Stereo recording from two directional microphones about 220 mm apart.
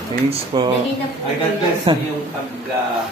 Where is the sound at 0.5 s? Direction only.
20° right (ahead or behind).